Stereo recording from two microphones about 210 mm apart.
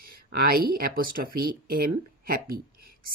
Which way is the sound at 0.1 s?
45° right (ahead or behind).